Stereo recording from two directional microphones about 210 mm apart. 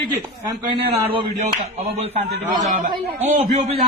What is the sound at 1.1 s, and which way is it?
Speech, 25° right (ahead or behind).